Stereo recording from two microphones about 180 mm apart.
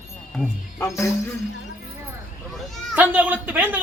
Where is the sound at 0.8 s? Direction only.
15° left (ahead or behind).